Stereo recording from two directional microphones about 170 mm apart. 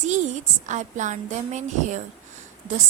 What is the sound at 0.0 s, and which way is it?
A woman's voice, 45° right (ahead or behind).